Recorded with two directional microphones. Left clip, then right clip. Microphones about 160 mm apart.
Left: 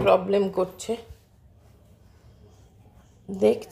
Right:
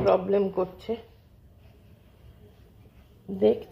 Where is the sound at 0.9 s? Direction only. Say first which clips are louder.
Left 2 dB; 30° left (ahead or behind).